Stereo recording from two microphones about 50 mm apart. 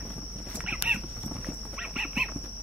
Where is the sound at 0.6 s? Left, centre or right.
Right.